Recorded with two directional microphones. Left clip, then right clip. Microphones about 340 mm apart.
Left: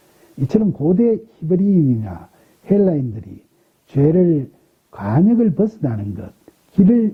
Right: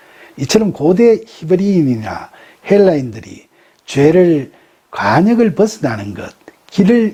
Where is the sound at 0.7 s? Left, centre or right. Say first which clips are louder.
Right 6 dB; right.